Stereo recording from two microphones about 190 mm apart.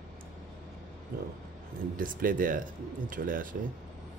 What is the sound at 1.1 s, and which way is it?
Speech, 50° right (ahead or behind).